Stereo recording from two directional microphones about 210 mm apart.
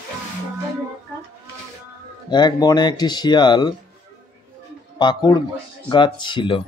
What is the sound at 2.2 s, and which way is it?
Speech, 20° left (ahead or behind).